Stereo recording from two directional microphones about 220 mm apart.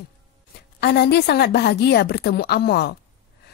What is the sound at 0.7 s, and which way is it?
A woman's voice, 50° left (ahead or behind).